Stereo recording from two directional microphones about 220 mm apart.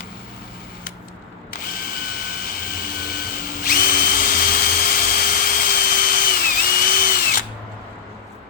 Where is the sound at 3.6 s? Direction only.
40° left (ahead or behind).